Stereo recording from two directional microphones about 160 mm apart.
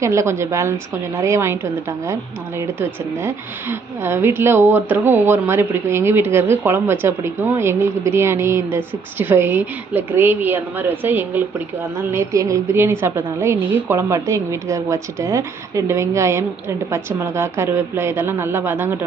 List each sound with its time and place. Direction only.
0.0 s speech: 15° right (ahead or behind)